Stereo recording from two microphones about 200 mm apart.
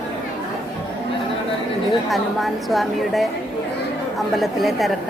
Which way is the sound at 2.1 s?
Centre (ahead or behind).